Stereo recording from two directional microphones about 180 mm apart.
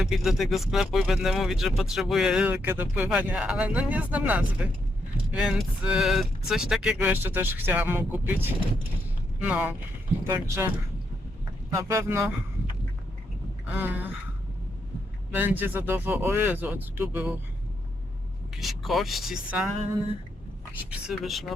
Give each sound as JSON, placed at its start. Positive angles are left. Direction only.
{"t": 0.0, "sound": "speech", "side_deg": 0}
{"t": 11.8, "sound": "speech", "side_deg": -15}
{"t": 13.7, "sound": "speech", "side_deg": -10}
{"t": 15.4, "sound": "speech", "side_deg": -10}
{"t": 18.5, "sound": "speech", "side_deg": 0}
{"t": 21.1, "sound": "speech", "side_deg": 0}